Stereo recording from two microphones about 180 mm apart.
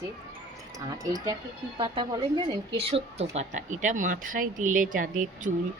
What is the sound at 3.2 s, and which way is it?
Speech, 40° right (ahead or behind).